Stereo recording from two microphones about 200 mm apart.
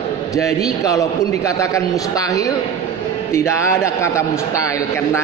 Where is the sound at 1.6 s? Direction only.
15° left (ahead or behind).